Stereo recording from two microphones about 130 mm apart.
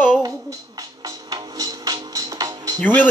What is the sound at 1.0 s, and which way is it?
Music, 30° right (ahead or behind).